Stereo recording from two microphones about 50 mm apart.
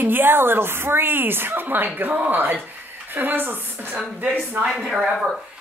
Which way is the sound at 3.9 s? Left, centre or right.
Right.